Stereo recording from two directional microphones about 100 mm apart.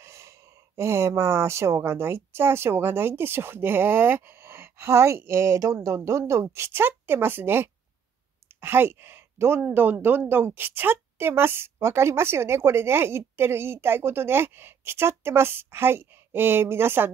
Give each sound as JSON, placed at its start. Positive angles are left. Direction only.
{"t": 0.0, "sound": "speech", "side_deg": -30}